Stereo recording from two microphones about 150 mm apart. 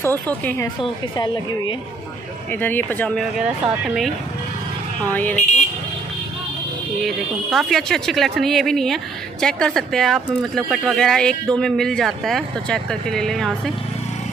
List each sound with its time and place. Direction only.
0.0 s speech: 15° left (ahead or behind)
1.1 s a woman's voice: 30° left (ahead or behind)
2.6 s speech: 10° left (ahead or behind)
5.1 s speech: 10° left (ahead or behind)
5.4 s vehicle: 50° left (ahead or behind)
7.0 s speech: centre (ahead or behind)